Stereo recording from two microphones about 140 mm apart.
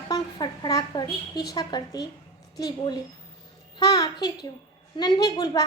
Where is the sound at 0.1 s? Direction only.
30° left (ahead or behind).